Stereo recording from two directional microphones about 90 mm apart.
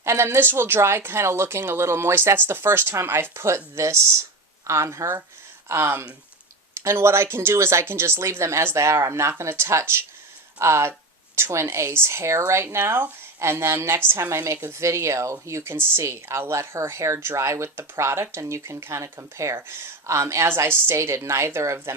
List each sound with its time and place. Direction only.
0.0 s speech: 30° right (ahead or behind)